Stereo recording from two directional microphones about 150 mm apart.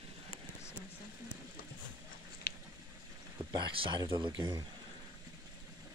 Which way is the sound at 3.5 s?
30° right (ahead or behind).